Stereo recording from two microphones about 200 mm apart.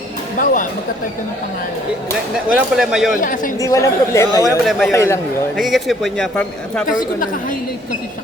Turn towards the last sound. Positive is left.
turn(degrees=45)  # may be behind; listen again after turning